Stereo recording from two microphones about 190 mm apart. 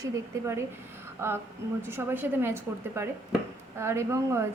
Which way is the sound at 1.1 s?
10° right (ahead or behind).